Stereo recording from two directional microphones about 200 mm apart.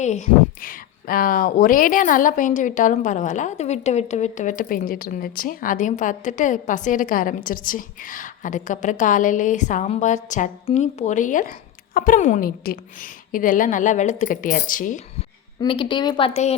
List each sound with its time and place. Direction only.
0.0 s speech: 35° left (ahead or behind)
15.6 s a woman's voice: 25° left (ahead or behind)